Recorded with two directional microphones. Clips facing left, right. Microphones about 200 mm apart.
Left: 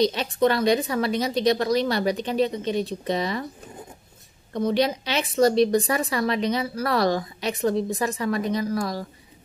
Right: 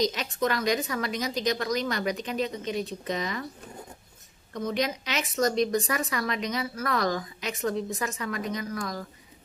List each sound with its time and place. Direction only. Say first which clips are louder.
0.0 s a woman's voice: left 6 dB; 30° left (ahead or behind)
4.6 s a woman's voice: left 6 dB; 30° left (ahead or behind)